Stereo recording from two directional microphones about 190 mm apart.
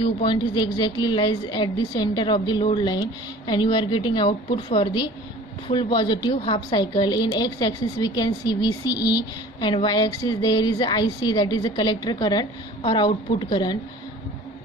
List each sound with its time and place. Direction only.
0.0 s a woman's voice: 25° left (ahead or behind)